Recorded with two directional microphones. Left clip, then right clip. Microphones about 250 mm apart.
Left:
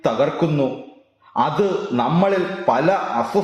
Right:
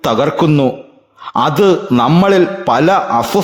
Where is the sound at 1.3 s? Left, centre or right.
Right.